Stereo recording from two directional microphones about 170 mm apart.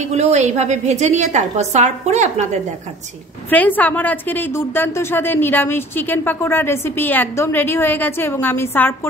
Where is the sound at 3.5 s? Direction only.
10° left (ahead or behind).